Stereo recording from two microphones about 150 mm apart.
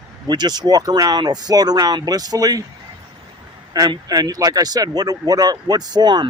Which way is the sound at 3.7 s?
25° right (ahead or behind).